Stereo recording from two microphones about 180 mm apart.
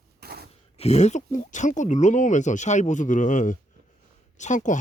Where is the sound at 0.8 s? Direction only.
40° left (ahead or behind).